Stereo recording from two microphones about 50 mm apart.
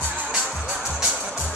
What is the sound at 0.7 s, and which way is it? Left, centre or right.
Music, centre.